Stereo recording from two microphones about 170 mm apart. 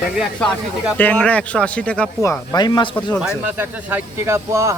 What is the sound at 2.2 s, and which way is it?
Speech, 20° left (ahead or behind).